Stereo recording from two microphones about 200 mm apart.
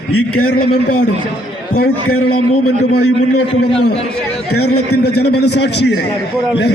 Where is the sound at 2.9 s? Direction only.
55° left (ahead or behind).